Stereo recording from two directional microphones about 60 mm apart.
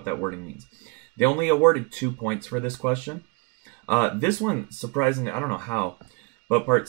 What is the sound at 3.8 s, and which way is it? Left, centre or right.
Speech, left.